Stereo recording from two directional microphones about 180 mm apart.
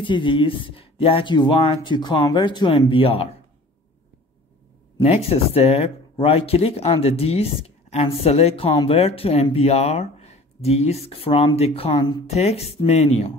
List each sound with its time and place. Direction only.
0.0 s speech: 25° left (ahead or behind)
5.0 s speech: 35° left (ahead or behind)